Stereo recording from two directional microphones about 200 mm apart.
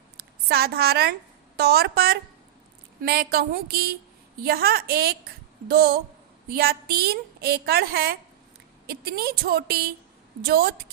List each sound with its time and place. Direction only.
0.2 s a woman's voice: 50° right (ahead or behind)